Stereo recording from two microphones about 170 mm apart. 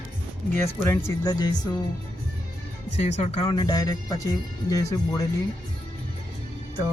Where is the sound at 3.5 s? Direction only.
25° left (ahead or behind).